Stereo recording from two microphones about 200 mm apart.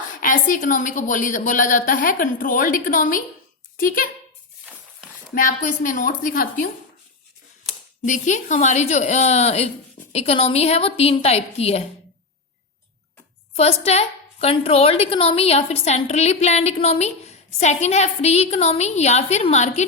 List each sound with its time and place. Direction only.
0.2 s a woman's voice: 40° left (ahead or behind)
4.6 s a sound: 5° right (ahead or behind)
5.3 s a woman's voice: 45° left (ahead or behind)
8.0 s a woman's voice: 40° left (ahead or behind)
13.6 s a woman's voice: 30° left (ahead or behind)